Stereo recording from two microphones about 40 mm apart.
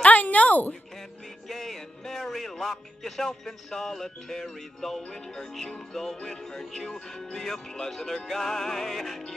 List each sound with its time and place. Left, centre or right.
0.0 s a sound: left
1.5 s speech: centre
5.0 s music: centre